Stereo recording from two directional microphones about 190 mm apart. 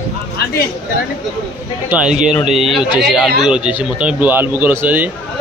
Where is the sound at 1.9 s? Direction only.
5° right (ahead or behind).